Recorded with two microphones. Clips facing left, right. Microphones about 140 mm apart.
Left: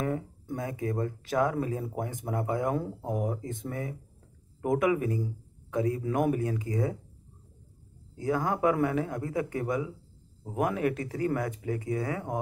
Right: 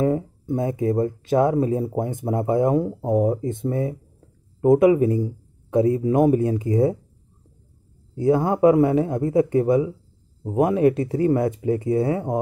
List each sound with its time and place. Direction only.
0.0 s speech: 25° right (ahead or behind)
8.2 s speech: 25° right (ahead or behind)